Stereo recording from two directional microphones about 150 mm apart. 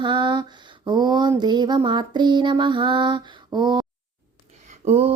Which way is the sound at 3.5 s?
30° right (ahead or behind).